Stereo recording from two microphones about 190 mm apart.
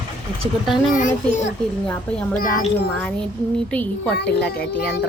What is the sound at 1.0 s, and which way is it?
Speech, 40° left (ahead or behind).